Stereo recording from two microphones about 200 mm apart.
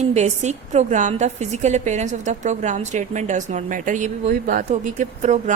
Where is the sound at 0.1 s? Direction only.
35° right (ahead or behind).